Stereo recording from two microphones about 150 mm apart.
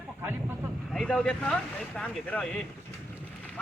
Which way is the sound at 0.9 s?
5° left (ahead or behind).